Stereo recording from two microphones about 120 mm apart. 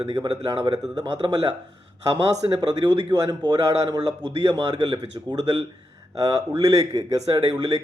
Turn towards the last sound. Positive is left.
turn(degrees=-30)  # may be behind; listen again after turning